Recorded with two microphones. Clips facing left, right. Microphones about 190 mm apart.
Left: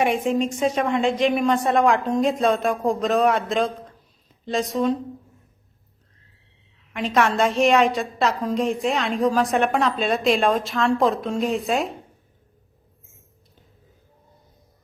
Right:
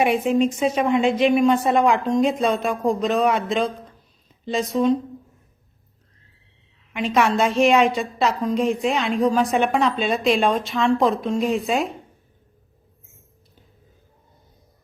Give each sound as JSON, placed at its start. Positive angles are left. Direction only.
{"t": 0.0, "sound": "a woman's voice", "side_deg": -5}
{"t": 6.9, "sound": "a woman's voice", "side_deg": 0}